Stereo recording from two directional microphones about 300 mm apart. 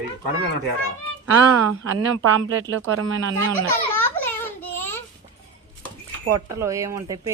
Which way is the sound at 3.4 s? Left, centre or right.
Centre.